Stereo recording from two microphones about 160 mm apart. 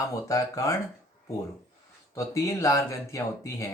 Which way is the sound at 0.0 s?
20° left (ahead or behind).